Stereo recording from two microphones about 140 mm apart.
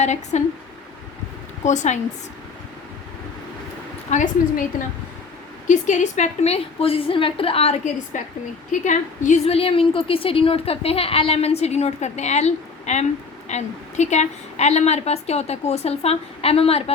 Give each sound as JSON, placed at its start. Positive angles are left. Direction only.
{"t": 0.0, "sound": "speech", "side_deg": 55}
{"t": 1.6, "sound": "speech", "side_deg": 60}
{"t": 4.1, "sound": "a woman's voice", "side_deg": 70}
{"t": 5.6, "sound": "a woman's voice", "side_deg": 60}
{"t": 8.7, "sound": "a woman's voice", "side_deg": 60}